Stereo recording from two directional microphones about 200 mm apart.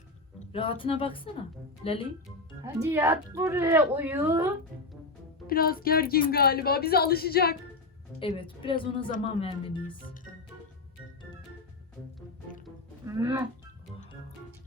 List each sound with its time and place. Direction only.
0.3 s a woman's voice: 25° left (ahead or behind)
2.6 s a woman's voice: 10° right (ahead or behind)
5.5 s speech: 45° left (ahead or behind)
8.2 s a woman's voice: 25° left (ahead or behind)
13.1 s speech: 15° right (ahead or behind)